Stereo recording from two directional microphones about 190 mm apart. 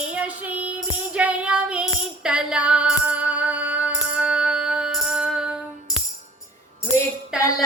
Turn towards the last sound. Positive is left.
turn(degrees=15)  # may be behind; listen again after turning